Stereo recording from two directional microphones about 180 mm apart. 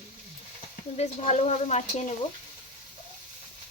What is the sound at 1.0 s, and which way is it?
Speech, 40° left (ahead or behind).